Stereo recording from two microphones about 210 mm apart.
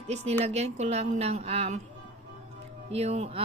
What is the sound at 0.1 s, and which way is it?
Speech, 30° right (ahead or behind).